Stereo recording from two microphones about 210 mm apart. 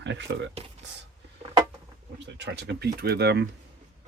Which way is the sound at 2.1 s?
55° right (ahead or behind).